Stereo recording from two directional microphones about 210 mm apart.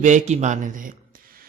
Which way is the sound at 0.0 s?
35° right (ahead or behind).